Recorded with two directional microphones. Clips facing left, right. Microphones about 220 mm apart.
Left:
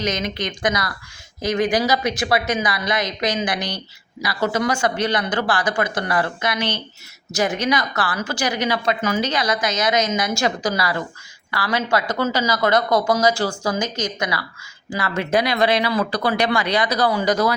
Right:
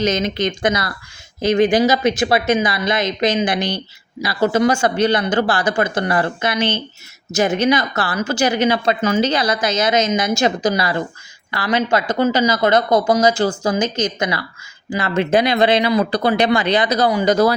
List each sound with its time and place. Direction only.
0.0 s a woman's voice: 25° right (ahead or behind)